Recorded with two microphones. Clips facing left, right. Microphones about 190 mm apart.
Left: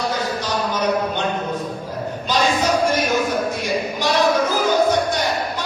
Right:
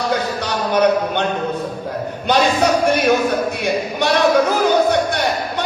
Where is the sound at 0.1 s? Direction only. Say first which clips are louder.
Right 3 dB; 65° right (ahead or behind).